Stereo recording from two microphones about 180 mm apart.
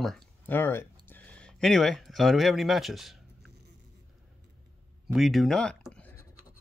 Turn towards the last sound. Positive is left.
turn(degrees=10)  # may be behind; listen again after turning